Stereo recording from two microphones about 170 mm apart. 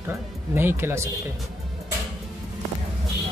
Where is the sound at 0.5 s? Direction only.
15° right (ahead or behind).